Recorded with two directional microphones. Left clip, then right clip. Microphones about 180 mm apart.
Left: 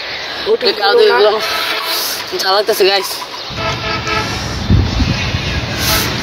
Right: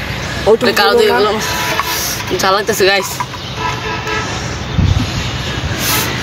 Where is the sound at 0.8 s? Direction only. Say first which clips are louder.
Left 1 dB; 45° left (ahead or behind).